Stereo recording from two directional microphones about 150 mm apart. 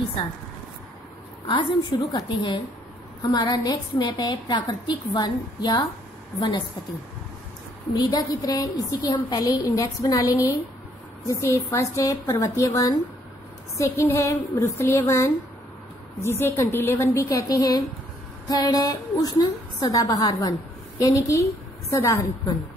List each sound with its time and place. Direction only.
1.5 s a woman's voice: 30° left (ahead or behind)
7.9 s a woman's voice: 25° left (ahead or behind)